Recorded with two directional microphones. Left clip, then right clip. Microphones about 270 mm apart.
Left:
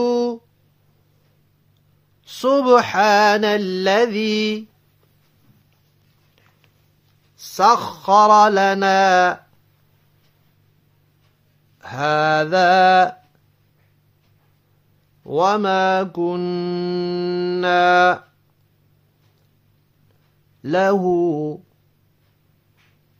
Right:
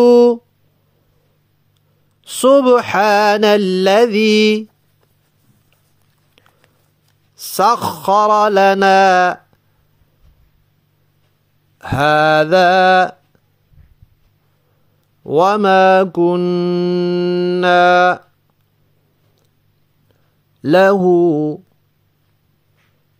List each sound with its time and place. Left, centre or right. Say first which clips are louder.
0.0 s music: right 11 dB; right
2.2 s mantra: right 6 dB; right
7.3 s mantra: right 1 dB; right
11.8 s mantra: right 6 dB; right
15.2 s mantra: right 5 dB; right
20.6 s mantra: right 7 dB; right